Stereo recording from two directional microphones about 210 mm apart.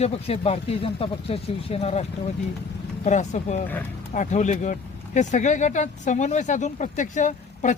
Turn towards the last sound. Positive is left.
turn(degrees=35)  # may be behind; listen again after turning